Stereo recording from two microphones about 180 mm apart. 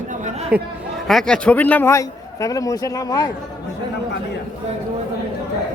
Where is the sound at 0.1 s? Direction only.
40° right (ahead or behind).